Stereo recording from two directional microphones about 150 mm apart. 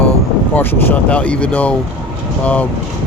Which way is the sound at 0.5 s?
15° left (ahead or behind).